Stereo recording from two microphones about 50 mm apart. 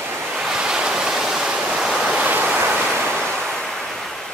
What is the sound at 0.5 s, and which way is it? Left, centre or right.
Waves, centre.